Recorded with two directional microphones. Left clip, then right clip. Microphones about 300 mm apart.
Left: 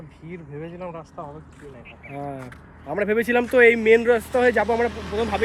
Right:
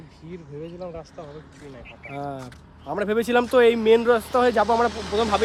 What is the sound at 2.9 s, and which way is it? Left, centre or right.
Speech, centre.